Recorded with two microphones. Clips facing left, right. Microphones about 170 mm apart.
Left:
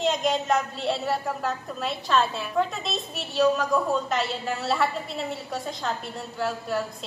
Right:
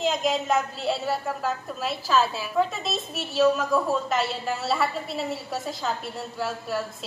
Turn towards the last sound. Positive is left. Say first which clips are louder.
# left 1 dB
turn(degrees=0)  # may be behind; listen again after turning